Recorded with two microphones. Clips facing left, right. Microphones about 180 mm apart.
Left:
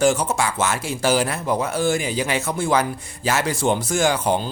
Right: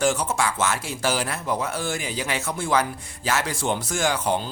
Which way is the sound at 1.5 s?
30° left (ahead or behind).